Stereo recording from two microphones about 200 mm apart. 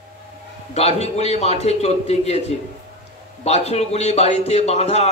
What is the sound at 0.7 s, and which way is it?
A man's voice, 30° left (ahead or behind).